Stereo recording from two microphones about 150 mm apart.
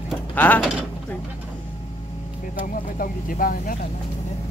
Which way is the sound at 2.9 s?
70° left (ahead or behind).